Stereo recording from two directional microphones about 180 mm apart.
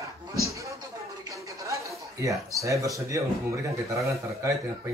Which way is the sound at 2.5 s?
15° right (ahead or behind).